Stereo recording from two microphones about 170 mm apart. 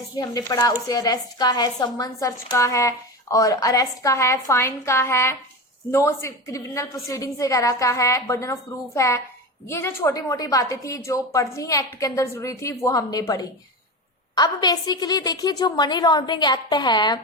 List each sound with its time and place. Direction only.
0.2 s a woman's voice: 20° left (ahead or behind)